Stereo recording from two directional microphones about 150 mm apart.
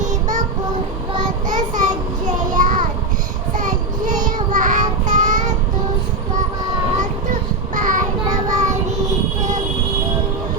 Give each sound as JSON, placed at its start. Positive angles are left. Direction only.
{"t": 0.0, "sound": "child singing", "side_deg": -55}
{"t": 1.5, "sound": "a sound", "side_deg": -60}
{"t": 2.6, "sound": "child singing", "side_deg": -60}
{"t": 7.8, "sound": "child singing", "side_deg": -60}
{"t": 8.3, "sound": "child singing", "side_deg": -25}